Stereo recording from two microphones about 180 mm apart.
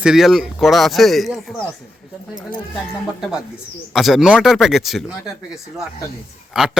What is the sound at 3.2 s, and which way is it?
Speech, centre (ahead or behind).